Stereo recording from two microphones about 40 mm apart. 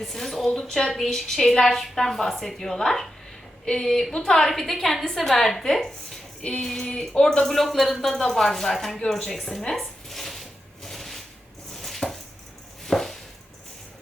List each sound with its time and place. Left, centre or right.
0.0 s a woman's voice: centre
7.4 s speech: centre
9.0 s a sound: centre
11.7 s chopping: centre